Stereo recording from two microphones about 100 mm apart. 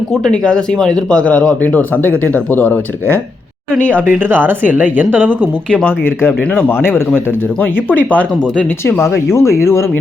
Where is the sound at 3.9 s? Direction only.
20° right (ahead or behind).